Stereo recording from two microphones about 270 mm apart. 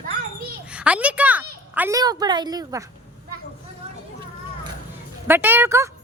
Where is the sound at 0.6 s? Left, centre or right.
Centre.